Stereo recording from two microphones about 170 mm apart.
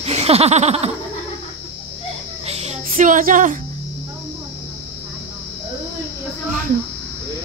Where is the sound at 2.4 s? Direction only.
40° right (ahead or behind).